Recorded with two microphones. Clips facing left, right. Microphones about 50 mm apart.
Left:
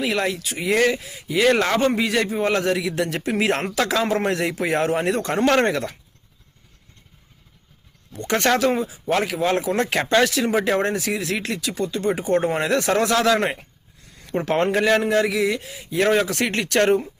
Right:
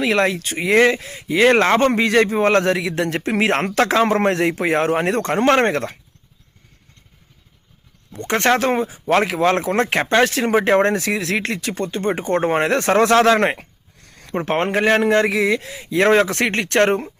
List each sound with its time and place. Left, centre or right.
0.0 s speech: right
1.5 s speech: right
1.9 s speech: right
8.1 s speech: right
13.4 s a sound: right
14.3 s speech: right
15.0 s speech: right